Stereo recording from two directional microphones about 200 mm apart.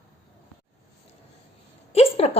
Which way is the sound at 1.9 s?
30° left (ahead or behind).